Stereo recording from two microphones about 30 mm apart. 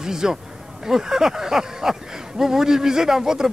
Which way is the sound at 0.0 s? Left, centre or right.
Centre.